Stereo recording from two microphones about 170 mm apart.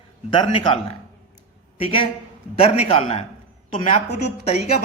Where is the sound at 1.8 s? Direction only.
30° left (ahead or behind).